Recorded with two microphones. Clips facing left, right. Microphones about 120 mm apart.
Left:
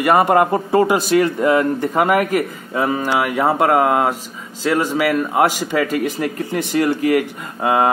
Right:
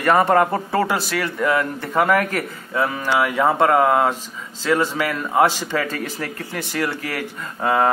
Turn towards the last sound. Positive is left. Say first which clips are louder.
# left 2 dB
turn(degrees=15)  # may be behind; listen again after turning